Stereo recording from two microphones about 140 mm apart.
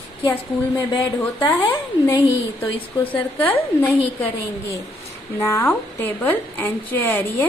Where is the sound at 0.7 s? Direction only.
25° left (ahead or behind).